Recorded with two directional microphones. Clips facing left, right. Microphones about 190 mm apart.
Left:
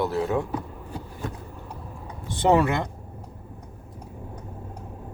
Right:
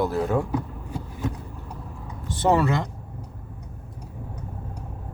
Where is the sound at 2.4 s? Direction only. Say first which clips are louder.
Left 1 dB; 15° left (ahead or behind).